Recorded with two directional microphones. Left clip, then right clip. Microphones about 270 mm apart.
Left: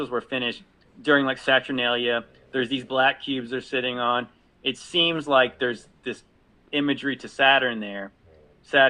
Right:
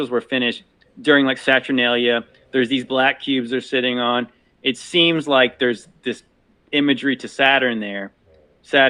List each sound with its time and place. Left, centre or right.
0.0 s a man's voice: right